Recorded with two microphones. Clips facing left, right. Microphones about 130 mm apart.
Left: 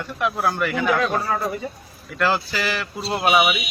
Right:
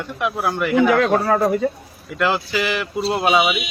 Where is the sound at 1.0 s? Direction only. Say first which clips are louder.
Right 6 dB; 65° right (ahead or behind).